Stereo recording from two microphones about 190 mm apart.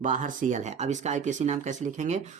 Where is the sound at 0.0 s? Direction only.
40° right (ahead or behind).